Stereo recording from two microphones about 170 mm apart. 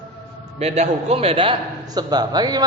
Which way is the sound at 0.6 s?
40° right (ahead or behind).